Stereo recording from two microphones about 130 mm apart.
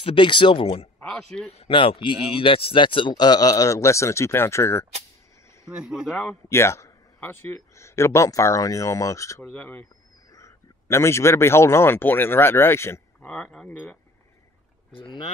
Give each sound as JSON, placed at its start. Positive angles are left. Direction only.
{"t": 0.0, "sound": "speech", "side_deg": 40}
{"t": 0.9, "sound": "speech", "side_deg": 5}
{"t": 1.5, "sound": "speech", "side_deg": 45}
{"t": 5.7, "sound": "speech", "side_deg": -5}
{"t": 6.5, "sound": "a man's voice", "side_deg": 20}
{"t": 9.5, "sound": "speech", "side_deg": 15}
{"t": 13.3, "sound": "speech", "side_deg": 5}
{"t": 15.0, "sound": "speech", "side_deg": 35}